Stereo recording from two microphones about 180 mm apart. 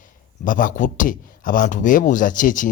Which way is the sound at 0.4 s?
50° left (ahead or behind).